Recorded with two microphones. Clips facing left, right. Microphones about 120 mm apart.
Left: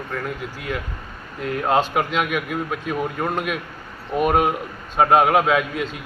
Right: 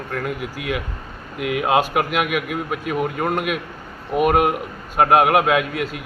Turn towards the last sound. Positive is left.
turn(degrees=-5)  # may be behind; listen again after turning